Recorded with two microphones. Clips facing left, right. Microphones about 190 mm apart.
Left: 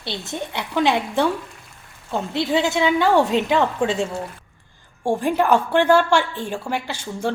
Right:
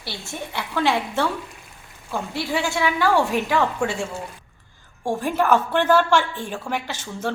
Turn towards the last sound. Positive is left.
turn(degrees=10)  # may be behind; listen again after turning